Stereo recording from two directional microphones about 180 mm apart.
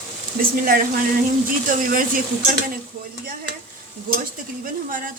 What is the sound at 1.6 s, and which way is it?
Speech, 50° right (ahead or behind).